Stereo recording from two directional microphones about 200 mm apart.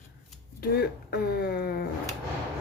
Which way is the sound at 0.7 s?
50° left (ahead or behind).